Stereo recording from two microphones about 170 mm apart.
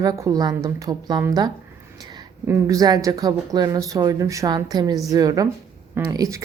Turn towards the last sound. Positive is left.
turn(degrees=-20)  # may be behind; listen again after turning